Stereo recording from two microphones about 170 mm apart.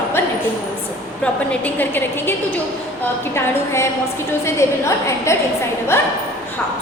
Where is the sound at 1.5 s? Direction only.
10° left (ahead or behind).